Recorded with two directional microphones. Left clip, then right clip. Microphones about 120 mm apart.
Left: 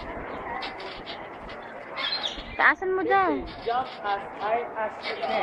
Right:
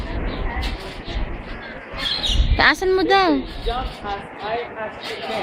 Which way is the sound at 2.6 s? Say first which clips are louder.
Right 5 dB; 50° right (ahead or behind).